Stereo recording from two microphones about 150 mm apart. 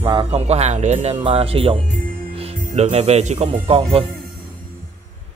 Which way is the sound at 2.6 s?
50° right (ahead or behind).